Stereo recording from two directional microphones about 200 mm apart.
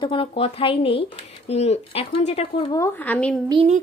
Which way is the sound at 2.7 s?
10° left (ahead or behind).